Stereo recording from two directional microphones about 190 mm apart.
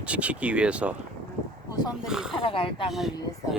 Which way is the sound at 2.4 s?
25° left (ahead or behind).